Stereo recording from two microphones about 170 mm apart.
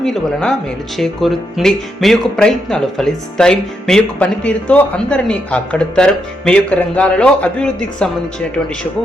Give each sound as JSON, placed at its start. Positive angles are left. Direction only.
{"t": 0.0, "sound": "speech", "side_deg": 5}